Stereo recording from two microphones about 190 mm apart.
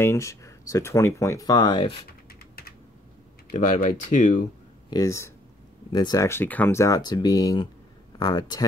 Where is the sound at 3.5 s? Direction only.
40° left (ahead or behind).